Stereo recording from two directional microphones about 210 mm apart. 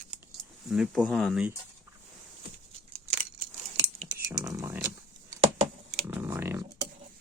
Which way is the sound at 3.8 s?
55° right (ahead or behind).